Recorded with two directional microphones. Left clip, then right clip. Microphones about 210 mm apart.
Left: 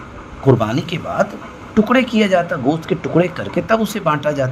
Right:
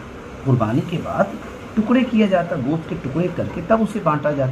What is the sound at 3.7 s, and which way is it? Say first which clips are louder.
Speech: left 1 dB; 45° left (ahead or behind).